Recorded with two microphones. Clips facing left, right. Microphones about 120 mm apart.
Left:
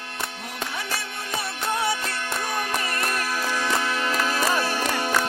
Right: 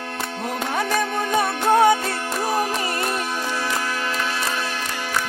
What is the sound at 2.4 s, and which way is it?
Music, 35° right (ahead or behind).